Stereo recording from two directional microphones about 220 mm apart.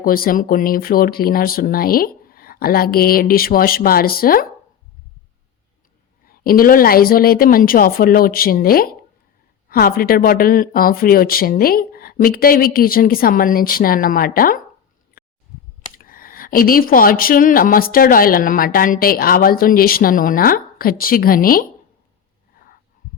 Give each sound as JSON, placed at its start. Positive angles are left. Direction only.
{"t": 0.0, "sound": "speech", "side_deg": 40}
{"t": 6.2, "sound": "speech", "side_deg": 40}
{"t": 15.2, "sound": "a sound", "side_deg": 40}
{"t": 16.0, "sound": "speech", "side_deg": 40}